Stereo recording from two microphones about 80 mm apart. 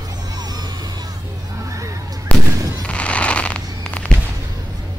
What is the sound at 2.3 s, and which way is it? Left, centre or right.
Fireworks, centre.